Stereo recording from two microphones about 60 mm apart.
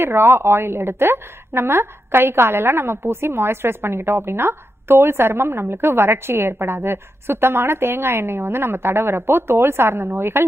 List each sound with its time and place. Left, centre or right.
0.0 s a woman's voice: right